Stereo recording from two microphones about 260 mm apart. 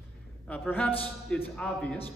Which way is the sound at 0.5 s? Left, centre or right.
Centre.